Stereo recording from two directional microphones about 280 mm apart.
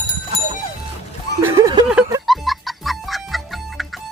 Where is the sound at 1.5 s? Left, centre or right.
Centre.